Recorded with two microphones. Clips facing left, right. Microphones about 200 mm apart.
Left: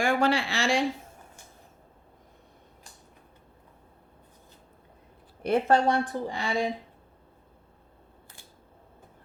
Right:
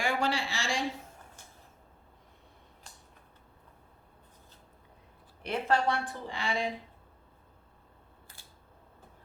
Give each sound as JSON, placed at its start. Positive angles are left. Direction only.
{"t": 0.0, "sound": "speech", "side_deg": 55}
{"t": 5.5, "sound": "a woman's voice", "side_deg": 45}